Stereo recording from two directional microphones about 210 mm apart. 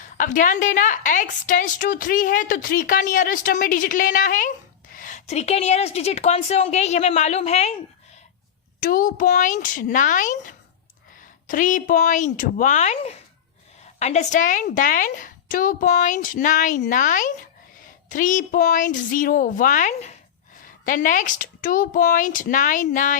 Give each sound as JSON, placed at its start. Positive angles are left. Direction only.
{"t": 0.0, "sound": "a woman's voice", "side_deg": 40}
{"t": 8.8, "sound": "a woman's voice", "side_deg": 40}